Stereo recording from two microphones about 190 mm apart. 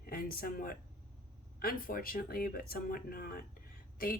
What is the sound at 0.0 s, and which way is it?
Speech, 50° left (ahead or behind).